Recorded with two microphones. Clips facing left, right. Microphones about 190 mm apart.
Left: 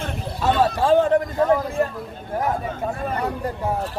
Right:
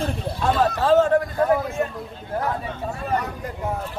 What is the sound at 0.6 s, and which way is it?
Speech, 15° left (ahead or behind).